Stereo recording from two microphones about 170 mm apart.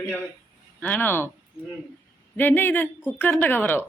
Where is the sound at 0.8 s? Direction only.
10° left (ahead or behind).